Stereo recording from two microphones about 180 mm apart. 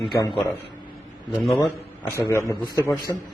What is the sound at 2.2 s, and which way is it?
Speech, 15° left (ahead or behind).